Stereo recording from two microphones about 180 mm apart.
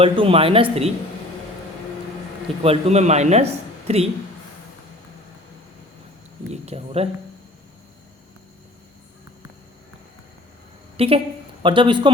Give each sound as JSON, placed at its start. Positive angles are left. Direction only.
{"t": 0.0, "sound": "a man's voice", "side_deg": -30}
{"t": 2.6, "sound": "a man's voice", "side_deg": -35}
{"t": 6.5, "sound": "a man's voice", "side_deg": -35}
{"t": 10.9, "sound": "a woman's voice", "side_deg": -30}